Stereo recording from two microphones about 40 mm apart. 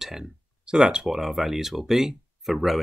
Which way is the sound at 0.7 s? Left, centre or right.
Right.